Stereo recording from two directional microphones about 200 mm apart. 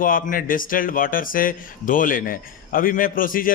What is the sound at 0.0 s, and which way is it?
A man's voice, 45° left (ahead or behind).